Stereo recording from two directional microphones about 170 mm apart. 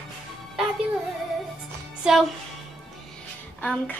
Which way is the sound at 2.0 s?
Centre (ahead or behind).